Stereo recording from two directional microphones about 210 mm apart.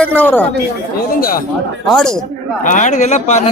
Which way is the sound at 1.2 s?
45° left (ahead or behind).